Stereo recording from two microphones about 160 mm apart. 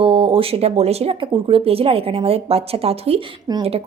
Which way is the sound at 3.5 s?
25° right (ahead or behind).